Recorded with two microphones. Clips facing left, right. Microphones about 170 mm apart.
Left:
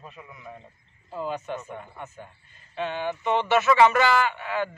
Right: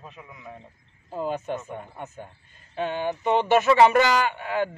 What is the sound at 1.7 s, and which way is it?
Speech, 20° right (ahead or behind).